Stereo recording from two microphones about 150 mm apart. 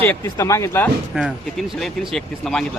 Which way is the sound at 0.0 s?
15° left (ahead or behind).